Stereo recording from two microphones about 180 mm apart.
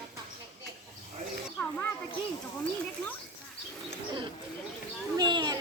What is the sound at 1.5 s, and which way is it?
Children playing, 10° left (ahead or behind).